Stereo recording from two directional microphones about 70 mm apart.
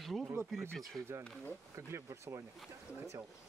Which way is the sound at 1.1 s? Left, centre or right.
Right.